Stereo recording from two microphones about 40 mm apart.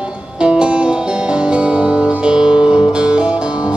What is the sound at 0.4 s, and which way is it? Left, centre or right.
Music, right.